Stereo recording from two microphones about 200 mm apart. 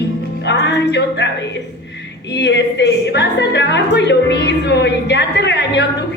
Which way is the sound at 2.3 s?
60° left (ahead or behind).